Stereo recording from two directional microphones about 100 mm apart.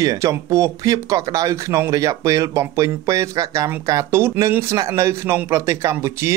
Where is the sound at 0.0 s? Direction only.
35° right (ahead or behind).